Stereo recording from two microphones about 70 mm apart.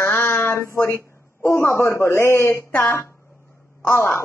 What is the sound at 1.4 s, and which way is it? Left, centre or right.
A woman's voice, left.